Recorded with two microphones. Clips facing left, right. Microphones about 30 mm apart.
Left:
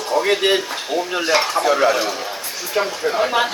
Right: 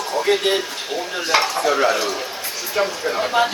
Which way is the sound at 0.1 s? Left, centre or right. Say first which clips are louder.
Left 2 dB; left.